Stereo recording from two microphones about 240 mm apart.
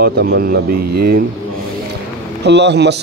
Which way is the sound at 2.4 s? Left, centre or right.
Right.